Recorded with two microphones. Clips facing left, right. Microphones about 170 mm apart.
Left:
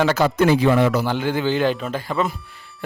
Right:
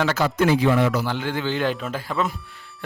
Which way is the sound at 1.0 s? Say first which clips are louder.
Left 4 dB; 10° left (ahead or behind).